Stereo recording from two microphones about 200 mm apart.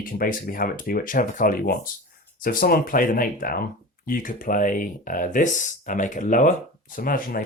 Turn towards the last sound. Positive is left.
turn(degrees=45)  # may be behind; listen again after turning